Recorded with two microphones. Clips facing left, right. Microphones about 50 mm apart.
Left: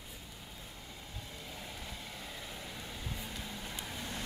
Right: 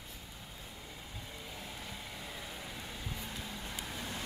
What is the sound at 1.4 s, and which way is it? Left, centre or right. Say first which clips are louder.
Vehicle: even; centre.